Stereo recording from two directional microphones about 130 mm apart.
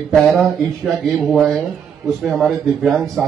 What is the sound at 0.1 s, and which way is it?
Speech, 5° left (ahead or behind).